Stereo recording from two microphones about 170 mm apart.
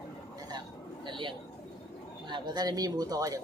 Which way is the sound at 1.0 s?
30° right (ahead or behind).